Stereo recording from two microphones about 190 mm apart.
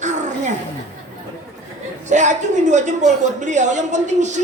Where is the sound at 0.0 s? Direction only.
40° right (ahead or behind).